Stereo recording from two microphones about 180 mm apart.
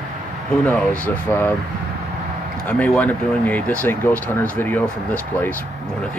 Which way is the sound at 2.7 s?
10° left (ahead or behind).